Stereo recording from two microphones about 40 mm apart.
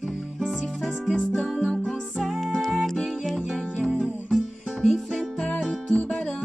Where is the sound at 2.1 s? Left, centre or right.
Centre.